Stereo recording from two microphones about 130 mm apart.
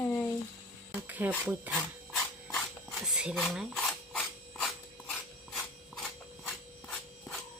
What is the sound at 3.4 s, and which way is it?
Speech, 5° left (ahead or behind).